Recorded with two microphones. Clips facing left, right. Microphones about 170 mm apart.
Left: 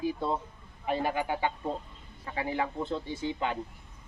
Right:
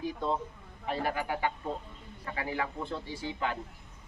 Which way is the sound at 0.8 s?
20° left (ahead or behind).